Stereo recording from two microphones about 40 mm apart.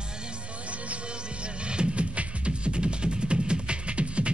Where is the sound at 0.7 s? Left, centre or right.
Right.